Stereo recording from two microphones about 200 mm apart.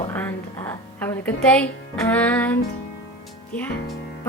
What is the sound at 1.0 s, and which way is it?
A woman's voice, 5° left (ahead or behind).